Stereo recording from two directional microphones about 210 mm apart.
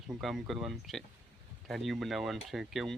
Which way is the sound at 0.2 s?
Centre (ahead or behind).